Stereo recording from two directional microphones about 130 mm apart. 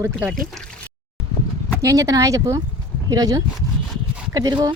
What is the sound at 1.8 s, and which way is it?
Speech, 25° right (ahead or behind).